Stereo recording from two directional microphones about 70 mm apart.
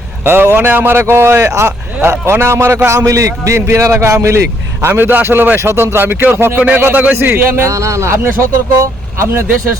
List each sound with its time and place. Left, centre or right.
0.3 s a man's voice: right
7.7 s speech: right